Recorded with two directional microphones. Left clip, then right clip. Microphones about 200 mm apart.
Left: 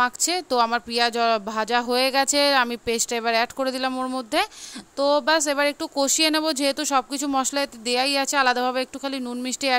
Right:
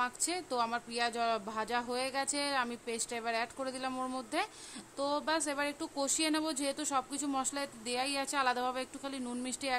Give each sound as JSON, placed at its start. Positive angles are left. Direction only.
{"t": 0.0, "sound": "speech", "side_deg": 40}